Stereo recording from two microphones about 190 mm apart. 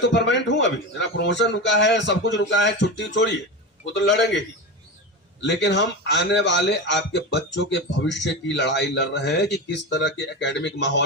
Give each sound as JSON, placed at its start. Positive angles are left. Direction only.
{"t": 0.0, "sound": "a man's voice", "side_deg": 70}